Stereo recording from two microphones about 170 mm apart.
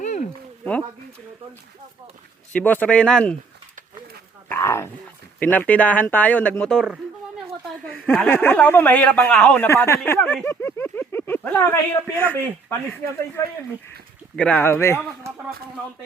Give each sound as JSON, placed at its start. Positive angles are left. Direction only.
{"t": 0.0, "sound": "a sound", "side_deg": 45}
{"t": 2.5, "sound": "speech", "side_deg": 10}
{"t": 4.4, "sound": "dog", "side_deg": 15}
{"t": 5.4, "sound": "speech", "side_deg": 10}
{"t": 7.9, "sound": "speech", "side_deg": 10}